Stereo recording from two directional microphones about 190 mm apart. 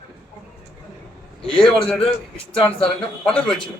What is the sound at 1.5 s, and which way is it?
Speech, 30° left (ahead or behind).